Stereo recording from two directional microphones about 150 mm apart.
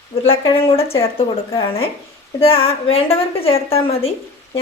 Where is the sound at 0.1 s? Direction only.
40° left (ahead or behind).